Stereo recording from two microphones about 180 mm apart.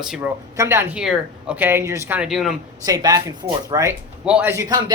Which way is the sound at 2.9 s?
20° right (ahead or behind).